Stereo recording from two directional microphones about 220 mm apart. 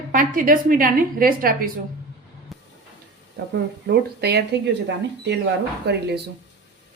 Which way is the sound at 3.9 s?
50° right (ahead or behind).